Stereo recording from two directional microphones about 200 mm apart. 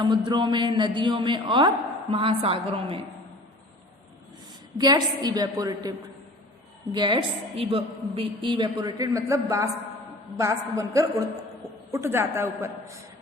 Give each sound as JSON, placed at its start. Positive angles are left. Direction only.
{"t": 0.0, "sound": "a woman's voice", "side_deg": -25}
{"t": 4.8, "sound": "a woman's voice", "side_deg": -20}
{"t": 6.9, "sound": "a woman's voice", "side_deg": -25}